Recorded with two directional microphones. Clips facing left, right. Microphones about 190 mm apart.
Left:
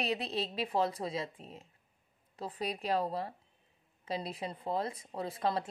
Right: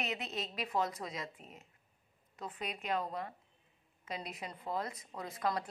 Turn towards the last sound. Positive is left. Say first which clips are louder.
# left 3 dB
turn(degrees=30)  # may be behind; listen again after turning